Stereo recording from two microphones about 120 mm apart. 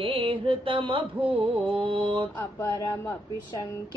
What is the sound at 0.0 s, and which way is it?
Mantra, 50° right (ahead or behind).